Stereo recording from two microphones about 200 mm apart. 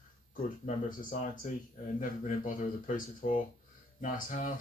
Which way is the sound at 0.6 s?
45° left (ahead or behind).